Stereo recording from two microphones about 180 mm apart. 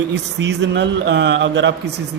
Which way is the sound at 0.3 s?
80° right.